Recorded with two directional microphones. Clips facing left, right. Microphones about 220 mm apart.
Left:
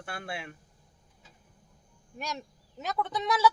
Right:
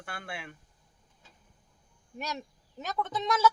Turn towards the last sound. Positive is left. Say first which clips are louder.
# left 1 dB
turn(degrees=0)  # may be behind; listen again after turning